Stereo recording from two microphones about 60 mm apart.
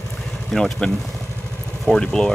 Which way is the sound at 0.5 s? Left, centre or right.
Centre.